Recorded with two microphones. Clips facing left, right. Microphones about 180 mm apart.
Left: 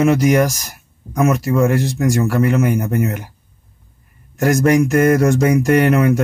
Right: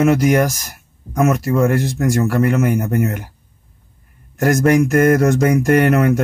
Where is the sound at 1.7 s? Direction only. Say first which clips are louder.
Even; 55° right (ahead or behind).